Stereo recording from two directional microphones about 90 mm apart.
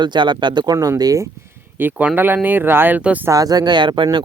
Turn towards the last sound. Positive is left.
turn(degrees=-60)  # may be behind; listen again after turning